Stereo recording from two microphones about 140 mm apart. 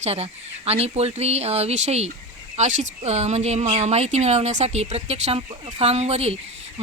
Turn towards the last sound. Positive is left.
turn(degrees=-50)  # may be behind; listen again after turning